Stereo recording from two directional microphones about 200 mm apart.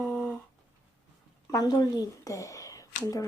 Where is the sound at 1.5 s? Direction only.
20° left (ahead or behind).